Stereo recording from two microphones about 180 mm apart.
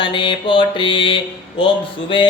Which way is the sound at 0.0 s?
25° left (ahead or behind).